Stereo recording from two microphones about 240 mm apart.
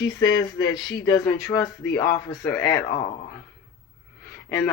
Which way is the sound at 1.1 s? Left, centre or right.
Centre.